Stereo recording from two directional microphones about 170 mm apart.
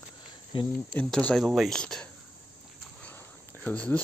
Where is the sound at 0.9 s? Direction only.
5° left (ahead or behind).